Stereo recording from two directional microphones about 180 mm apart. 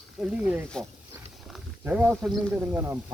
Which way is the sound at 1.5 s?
5° right (ahead or behind).